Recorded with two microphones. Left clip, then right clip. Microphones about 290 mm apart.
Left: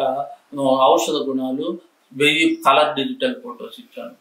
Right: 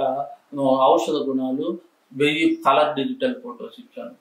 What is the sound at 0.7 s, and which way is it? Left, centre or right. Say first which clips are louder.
Speech: left 2 dB; centre.